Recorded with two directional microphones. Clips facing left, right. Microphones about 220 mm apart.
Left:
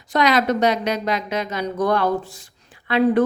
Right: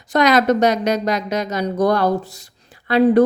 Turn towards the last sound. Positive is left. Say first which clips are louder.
# right 4 dB
turn(degrees=-40)  # may be behind; listen again after turning